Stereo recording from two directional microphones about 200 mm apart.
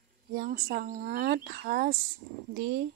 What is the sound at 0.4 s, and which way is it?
Speech, 50° right (ahead or behind).